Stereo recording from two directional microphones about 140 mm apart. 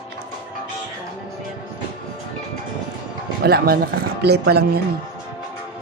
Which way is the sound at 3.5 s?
90° right.